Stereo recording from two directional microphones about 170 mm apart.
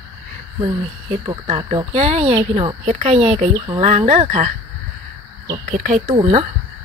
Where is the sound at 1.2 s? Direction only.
30° right (ahead or behind).